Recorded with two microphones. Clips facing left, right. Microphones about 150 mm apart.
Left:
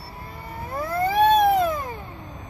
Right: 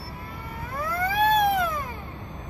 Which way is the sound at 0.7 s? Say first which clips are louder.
Left 4 dB; 25° left (ahead or behind).